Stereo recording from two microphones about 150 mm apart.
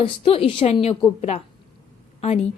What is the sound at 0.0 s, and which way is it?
A woman's voice, 40° left (ahead or behind).